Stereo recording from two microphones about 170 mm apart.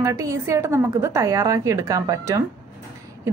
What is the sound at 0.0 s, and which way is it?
A woman's voice, 20° right (ahead or behind).